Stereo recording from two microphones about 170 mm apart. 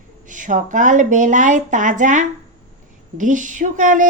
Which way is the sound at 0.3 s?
50° right (ahead or behind).